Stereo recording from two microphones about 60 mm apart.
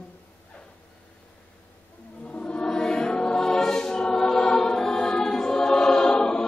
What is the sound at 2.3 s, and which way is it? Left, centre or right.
Choir, centre.